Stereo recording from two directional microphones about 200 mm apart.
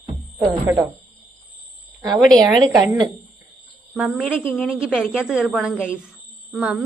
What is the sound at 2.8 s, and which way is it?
Speech, 20° right (ahead or behind).